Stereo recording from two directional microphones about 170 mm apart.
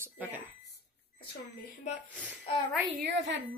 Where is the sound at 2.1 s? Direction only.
10° right (ahead or behind).